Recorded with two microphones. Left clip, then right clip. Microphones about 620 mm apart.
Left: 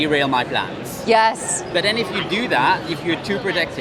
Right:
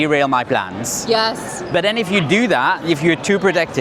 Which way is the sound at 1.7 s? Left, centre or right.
Right.